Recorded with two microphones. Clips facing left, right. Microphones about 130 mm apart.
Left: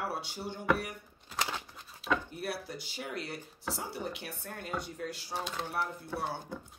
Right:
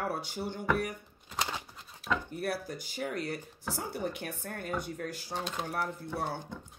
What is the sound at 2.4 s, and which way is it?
Speech, 50° right (ahead or behind).